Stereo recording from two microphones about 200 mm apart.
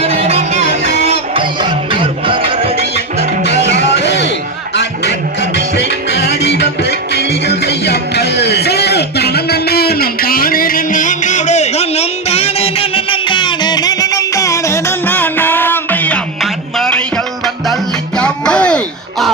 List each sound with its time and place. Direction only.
0.0 s music: 30° right (ahead or behind)
3.6 s music: 60° left (ahead or behind); by 17.0 s centre (ahead or behind)
18.2 s music: 5° left (ahead or behind)